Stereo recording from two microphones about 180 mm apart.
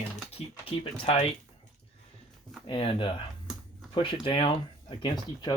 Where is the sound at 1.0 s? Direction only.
35° left (ahead or behind).